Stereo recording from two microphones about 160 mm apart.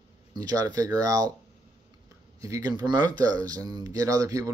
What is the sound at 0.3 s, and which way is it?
Speech, 25° right (ahead or behind).